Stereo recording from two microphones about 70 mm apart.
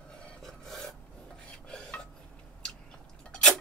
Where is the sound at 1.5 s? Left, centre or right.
Centre.